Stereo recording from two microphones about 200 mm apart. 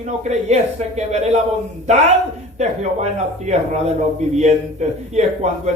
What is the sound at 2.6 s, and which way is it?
A man's voice, 35° right (ahead or behind).